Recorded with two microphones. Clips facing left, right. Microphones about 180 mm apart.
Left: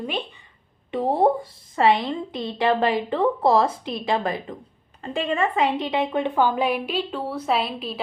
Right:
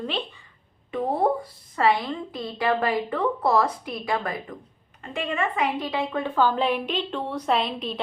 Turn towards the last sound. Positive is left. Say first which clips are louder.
# even
turn(degrees=5)  # may be behind; listen again after turning